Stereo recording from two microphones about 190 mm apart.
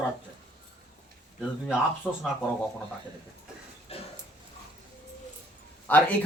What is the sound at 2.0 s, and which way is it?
Speech, 5° right (ahead or behind).